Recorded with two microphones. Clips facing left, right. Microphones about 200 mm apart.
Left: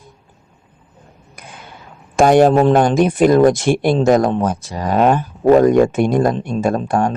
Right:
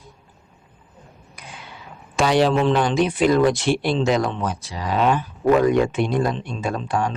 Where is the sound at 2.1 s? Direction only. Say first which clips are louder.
Left 7 dB; 50° left (ahead or behind).